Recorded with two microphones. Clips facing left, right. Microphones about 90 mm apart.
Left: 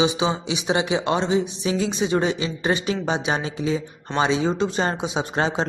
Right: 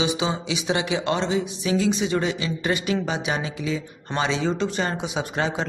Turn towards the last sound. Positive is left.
turn(degrees=30)  # may be behind; listen again after turning